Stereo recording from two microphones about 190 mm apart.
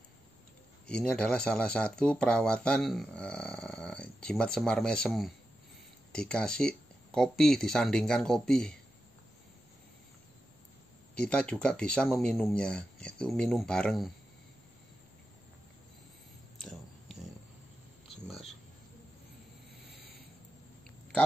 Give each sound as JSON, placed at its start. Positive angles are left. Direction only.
{"t": 0.8, "sound": "speech", "side_deg": 5}
{"t": 11.1, "sound": "speech", "side_deg": 5}
{"t": 16.5, "sound": "a sound", "side_deg": 0}